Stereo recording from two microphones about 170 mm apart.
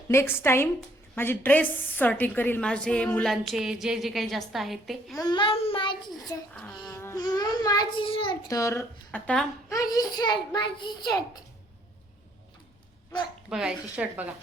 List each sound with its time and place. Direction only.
0.1 s a woman's voice: 15° left (ahead or behind)
5.1 s child singing: 25° left (ahead or behind)
6.3 s a child's voice: 20° left (ahead or behind)
9.6 s a child's voice: 20° left (ahead or behind)
13.5 s a woman's voice: 5° right (ahead or behind)